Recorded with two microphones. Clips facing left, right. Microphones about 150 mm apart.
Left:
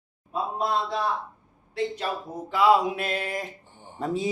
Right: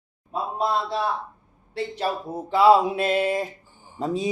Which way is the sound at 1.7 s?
30° right (ahead or behind).